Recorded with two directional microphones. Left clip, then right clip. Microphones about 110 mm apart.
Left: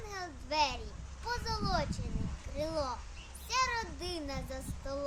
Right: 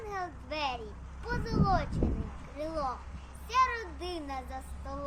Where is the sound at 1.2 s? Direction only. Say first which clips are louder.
Right 5 dB; 45° left (ahead or behind).